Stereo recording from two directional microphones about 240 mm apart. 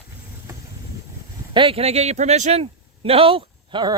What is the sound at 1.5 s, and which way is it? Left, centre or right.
A man's voice, right.